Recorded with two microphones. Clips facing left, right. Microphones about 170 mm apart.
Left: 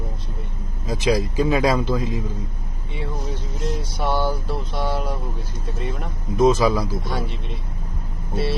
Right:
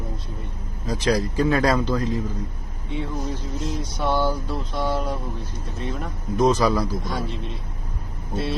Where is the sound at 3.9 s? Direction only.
10° left (ahead or behind).